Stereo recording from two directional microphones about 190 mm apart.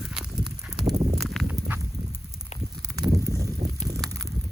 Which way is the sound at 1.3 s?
5° right (ahead or behind).